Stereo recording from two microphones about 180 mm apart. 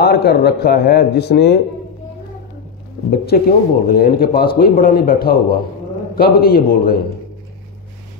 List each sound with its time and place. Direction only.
0.0 s a man's voice: 60° left (ahead or behind)
3.1 s a man's voice: 60° left (ahead or behind)